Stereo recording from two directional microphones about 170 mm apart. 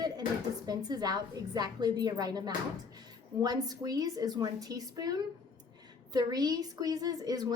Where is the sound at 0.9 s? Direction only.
25° right (ahead or behind).